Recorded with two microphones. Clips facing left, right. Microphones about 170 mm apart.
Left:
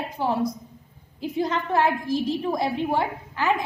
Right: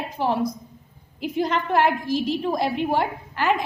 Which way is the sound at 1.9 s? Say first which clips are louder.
Right 1 dB; 90° right.